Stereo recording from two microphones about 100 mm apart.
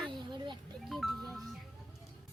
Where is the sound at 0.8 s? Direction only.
Centre (ahead or behind).